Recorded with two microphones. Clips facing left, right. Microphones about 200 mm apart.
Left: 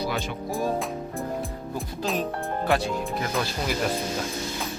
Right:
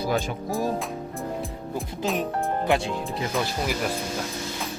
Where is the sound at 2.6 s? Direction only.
20° right (ahead or behind).